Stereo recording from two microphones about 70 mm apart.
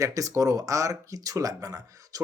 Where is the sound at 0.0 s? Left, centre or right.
Right.